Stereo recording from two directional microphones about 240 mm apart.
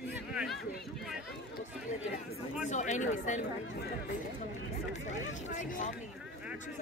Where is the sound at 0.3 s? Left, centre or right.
Centre.